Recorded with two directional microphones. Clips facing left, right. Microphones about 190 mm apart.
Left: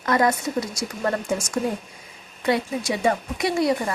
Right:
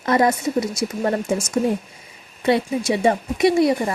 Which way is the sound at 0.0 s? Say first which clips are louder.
Right 3 dB; 25° right (ahead or behind).